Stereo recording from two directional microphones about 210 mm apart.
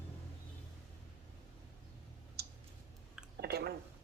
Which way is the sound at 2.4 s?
50° right (ahead or behind).